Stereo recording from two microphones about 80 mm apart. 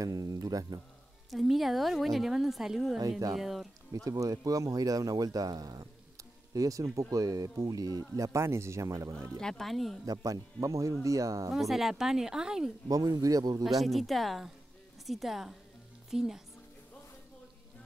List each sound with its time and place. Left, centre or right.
0.0 s a sound: right
1.3 s a woman's voice: centre
3.0 s speech: right
3.3 s a woman's voice: centre
3.9 s speech: right
8.2 s speech: right
9.4 s a woman's voice: centre
10.0 s speech: right
11.5 s a woman's voice: centre
12.8 s speech: right
13.7 s a woman's voice: centre